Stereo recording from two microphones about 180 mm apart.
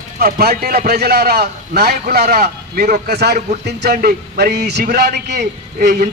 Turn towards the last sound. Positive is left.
turn(degrees=-65)  # may be behind; listen again after turning